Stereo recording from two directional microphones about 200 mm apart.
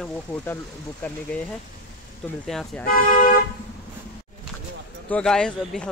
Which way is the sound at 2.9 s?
40° left (ahead or behind).